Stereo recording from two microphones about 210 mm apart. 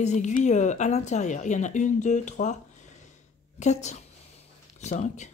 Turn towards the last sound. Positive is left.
turn(degrees=35)  # may be behind; listen again after turning